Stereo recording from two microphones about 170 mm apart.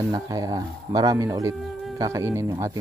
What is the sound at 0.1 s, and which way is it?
Speech, 20° right (ahead or behind).